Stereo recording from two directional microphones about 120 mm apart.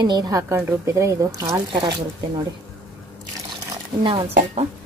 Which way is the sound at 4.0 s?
50° right (ahead or behind).